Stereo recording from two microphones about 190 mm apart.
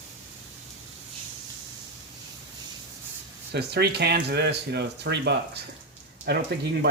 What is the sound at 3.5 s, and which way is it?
Speech, 60° right (ahead or behind).